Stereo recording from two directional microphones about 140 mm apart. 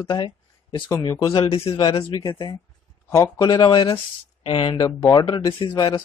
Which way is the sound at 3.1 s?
20° left (ahead or behind).